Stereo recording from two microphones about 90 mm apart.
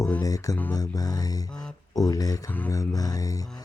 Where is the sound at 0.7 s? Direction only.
45° left (ahead or behind).